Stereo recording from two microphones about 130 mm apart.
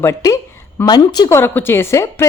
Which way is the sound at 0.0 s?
25° left (ahead or behind).